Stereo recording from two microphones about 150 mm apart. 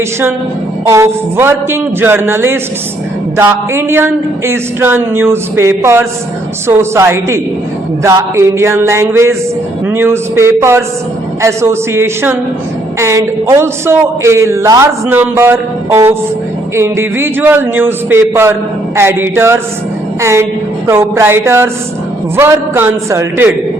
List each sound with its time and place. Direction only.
0.9 s a man's voice: 20° right (ahead or behind)